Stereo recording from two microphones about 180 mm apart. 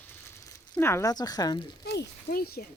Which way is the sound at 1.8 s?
65° left (ahead or behind).